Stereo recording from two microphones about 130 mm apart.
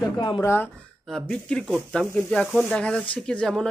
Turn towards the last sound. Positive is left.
turn(degrees=5)  # may be behind; listen again after turning